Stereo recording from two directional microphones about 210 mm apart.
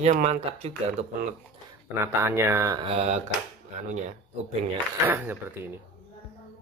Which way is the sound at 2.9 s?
30° right (ahead or behind).